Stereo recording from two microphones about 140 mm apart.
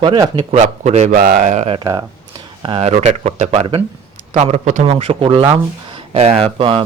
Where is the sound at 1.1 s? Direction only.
85° right; by 1.6 s 70° right (ahead or behind).